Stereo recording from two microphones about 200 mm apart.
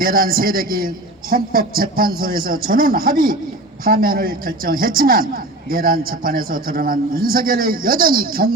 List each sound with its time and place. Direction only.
0.0 s a man's voice: 45° right (ahead or behind)